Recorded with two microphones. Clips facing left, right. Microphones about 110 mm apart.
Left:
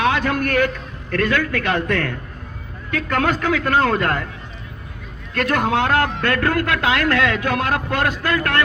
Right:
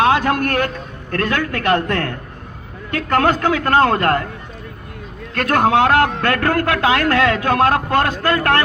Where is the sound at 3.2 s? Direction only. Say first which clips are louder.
Right 3 dB; 65° right (ahead or behind).